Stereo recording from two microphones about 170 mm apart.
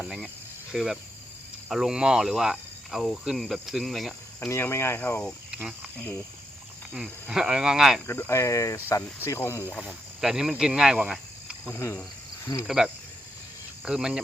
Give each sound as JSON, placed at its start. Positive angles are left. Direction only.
{"t": 0.0, "sound": "speech", "side_deg": -5}
{"t": 4.4, "sound": "speech", "side_deg": 15}
{"t": 5.5, "sound": "cricket", "side_deg": -5}
{"t": 6.9, "sound": "speech", "side_deg": -5}
{"t": 8.0, "sound": "speech", "side_deg": 15}
{"t": 9.8, "sound": "speech", "side_deg": -5}
{"t": 11.7, "sound": "speech", "side_deg": 15}
{"t": 12.6, "sound": "speech", "side_deg": 0}